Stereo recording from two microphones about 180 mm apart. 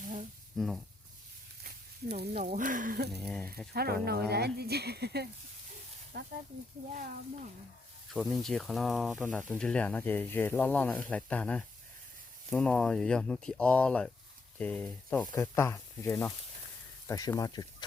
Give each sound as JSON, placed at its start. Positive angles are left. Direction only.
{"t": 0.5, "sound": "speech", "side_deg": 0}
{"t": 1.6, "sound": "a sound", "side_deg": -60}
{"t": 2.4, "sound": "speech", "side_deg": -45}
{"t": 3.1, "sound": "speech", "side_deg": 0}
{"t": 3.7, "sound": "speech", "side_deg": -60}
{"t": 6.9, "sound": "speech", "side_deg": -50}
{"t": 8.1, "sound": "speech", "side_deg": 0}